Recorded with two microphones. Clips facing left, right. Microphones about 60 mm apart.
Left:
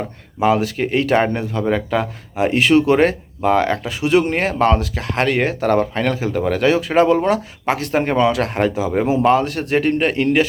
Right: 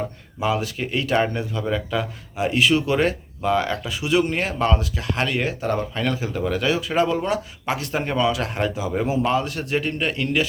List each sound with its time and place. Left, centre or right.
0.3 s a man's voice: left